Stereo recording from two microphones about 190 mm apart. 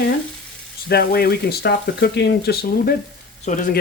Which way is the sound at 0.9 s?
55° left (ahead or behind).